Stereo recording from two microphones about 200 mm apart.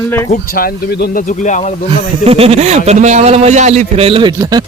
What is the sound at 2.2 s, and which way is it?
A man's voice, 30° right (ahead or behind).